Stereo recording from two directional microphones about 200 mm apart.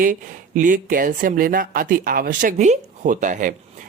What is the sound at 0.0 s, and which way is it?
Speech, 40° right (ahead or behind).